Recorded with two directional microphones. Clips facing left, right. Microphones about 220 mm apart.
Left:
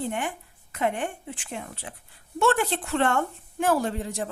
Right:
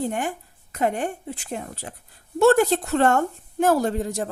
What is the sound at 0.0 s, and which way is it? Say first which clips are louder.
A woman's voice: right 4 dB; 40° right (ahead or behind).